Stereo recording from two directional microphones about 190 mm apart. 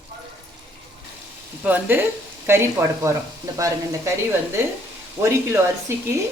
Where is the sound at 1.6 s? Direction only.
10° right (ahead or behind).